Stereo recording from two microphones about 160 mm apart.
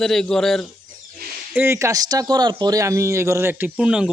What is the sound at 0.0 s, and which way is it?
Speech, 5° left (ahead or behind).